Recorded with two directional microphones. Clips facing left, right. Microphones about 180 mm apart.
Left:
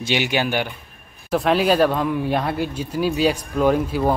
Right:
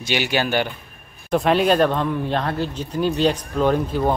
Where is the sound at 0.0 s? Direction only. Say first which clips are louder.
Left 1 dB; 20° left (ahead or behind).